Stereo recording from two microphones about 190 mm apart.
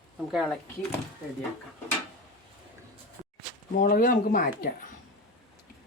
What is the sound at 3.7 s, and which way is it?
Speech, 45° left (ahead or behind).